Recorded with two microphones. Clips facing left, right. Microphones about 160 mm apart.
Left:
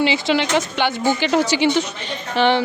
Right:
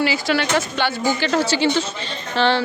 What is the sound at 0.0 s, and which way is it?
A woman's voice, 20° left (ahead or behind).